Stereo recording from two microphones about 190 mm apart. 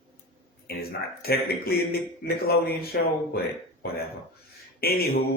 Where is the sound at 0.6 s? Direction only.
55° left (ahead or behind).